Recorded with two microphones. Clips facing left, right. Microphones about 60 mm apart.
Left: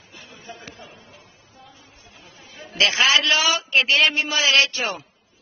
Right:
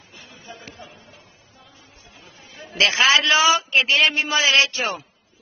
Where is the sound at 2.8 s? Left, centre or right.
Right.